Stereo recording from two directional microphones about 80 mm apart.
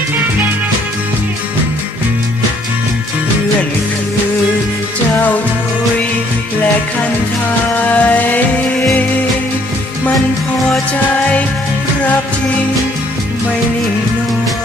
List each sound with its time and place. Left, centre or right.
7.8 s music: centre